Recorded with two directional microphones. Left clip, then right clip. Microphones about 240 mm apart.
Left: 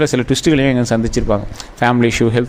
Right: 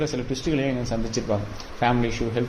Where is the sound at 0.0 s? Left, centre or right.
Left.